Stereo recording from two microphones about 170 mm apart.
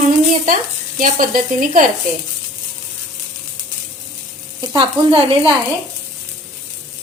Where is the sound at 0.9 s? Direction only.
50° right (ahead or behind).